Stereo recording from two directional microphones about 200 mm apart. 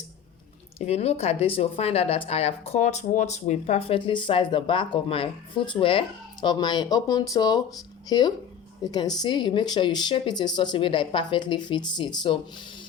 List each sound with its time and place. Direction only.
0.8 s speech: 30° left (ahead or behind)